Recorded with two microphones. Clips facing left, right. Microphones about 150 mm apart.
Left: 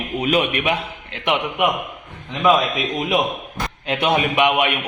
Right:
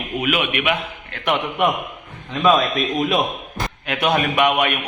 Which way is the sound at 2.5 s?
20° left (ahead or behind).